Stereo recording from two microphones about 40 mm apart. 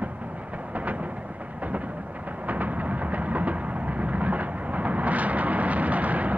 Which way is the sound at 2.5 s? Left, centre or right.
Right.